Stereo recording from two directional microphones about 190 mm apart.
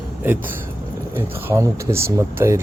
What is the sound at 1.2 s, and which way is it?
Speech, 15° right (ahead or behind).